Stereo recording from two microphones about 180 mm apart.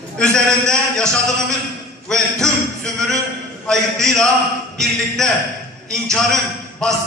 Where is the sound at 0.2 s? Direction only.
5° left (ahead or behind).